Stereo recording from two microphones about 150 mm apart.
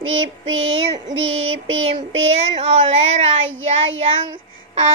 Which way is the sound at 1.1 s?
35° right (ahead or behind).